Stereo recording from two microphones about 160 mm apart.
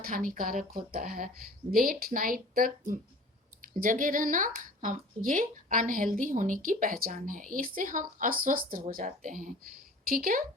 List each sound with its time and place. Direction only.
0.0 s speech: 60° right (ahead or behind)